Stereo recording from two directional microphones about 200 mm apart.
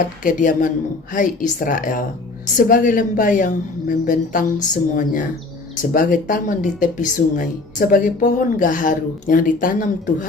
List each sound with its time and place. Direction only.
0.2 s a woman's voice: 40° left (ahead or behind)